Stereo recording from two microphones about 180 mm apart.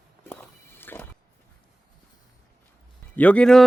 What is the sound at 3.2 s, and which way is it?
Speech, 5° left (ahead or behind).